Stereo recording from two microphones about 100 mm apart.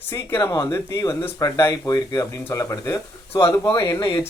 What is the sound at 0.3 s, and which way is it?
Speech, 25° left (ahead or behind).